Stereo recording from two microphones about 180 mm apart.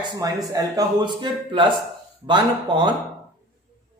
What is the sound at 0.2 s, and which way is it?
Speech, 20° right (ahead or behind).